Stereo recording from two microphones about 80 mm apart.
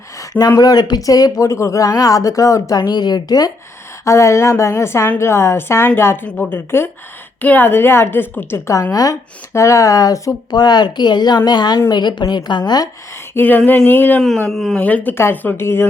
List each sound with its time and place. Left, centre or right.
0.2 s speech: left
2.9 s speech: left
4.0 s a woman's voice: left
6.2 s speech: centre
6.5 s a woman's voice: left
8.9 s speech: left
13.3 s a woman's voice: left
14.2 s speech: centre
14.8 s a woman's voice: centre